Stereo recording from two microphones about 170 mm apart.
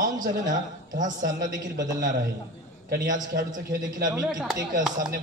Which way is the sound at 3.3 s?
60° right (ahead or behind).